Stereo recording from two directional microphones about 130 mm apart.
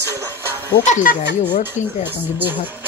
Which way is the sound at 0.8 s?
65° left (ahead or behind).